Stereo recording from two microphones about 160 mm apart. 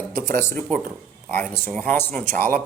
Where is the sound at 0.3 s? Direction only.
15° left (ahead or behind).